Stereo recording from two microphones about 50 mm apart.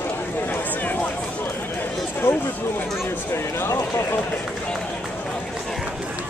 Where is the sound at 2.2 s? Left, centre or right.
Left.